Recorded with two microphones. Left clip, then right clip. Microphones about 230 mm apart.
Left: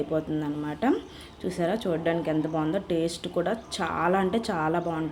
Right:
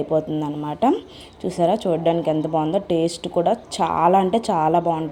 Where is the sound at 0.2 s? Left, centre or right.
Right.